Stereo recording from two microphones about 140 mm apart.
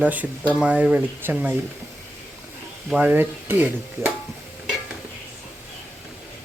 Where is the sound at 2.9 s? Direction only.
10° right (ahead or behind).